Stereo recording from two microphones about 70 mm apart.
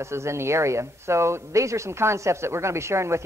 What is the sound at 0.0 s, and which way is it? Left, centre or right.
A man's voice, right.